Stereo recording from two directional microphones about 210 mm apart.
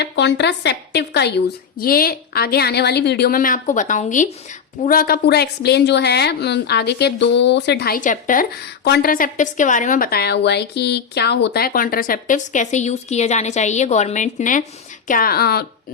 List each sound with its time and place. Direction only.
0.0 s a woman's voice: 55° left (ahead or behind)